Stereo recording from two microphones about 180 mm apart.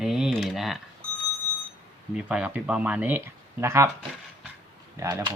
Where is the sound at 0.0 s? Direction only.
5° right (ahead or behind).